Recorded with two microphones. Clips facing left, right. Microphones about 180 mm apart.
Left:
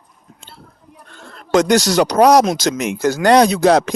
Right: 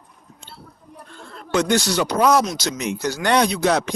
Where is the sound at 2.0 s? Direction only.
85° left.